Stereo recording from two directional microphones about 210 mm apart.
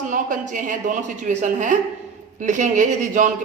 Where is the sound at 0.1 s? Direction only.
40° right (ahead or behind).